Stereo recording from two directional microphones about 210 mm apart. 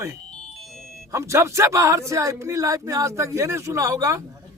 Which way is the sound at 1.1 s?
15° right (ahead or behind).